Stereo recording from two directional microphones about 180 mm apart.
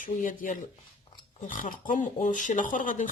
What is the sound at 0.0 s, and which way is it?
Speech, 45° left (ahead or behind).